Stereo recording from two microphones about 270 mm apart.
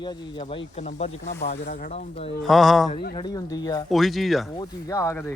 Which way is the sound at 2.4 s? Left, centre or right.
Centre.